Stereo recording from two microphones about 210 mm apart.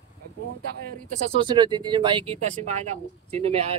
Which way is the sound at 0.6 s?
45° right (ahead or behind).